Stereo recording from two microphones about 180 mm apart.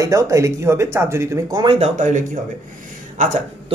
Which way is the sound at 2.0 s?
45° right (ahead or behind).